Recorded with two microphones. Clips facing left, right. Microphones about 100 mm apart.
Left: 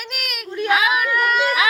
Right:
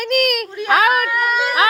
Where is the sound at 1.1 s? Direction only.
5° right (ahead or behind).